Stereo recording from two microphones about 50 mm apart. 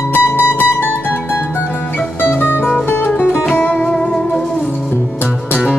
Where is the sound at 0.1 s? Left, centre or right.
Left.